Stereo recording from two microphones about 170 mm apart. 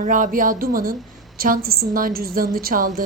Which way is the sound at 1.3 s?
55° right (ahead or behind).